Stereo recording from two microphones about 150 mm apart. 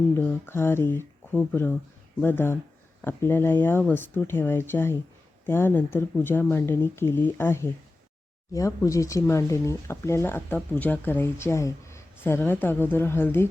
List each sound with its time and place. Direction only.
0.2 s speech: 15° left (ahead or behind)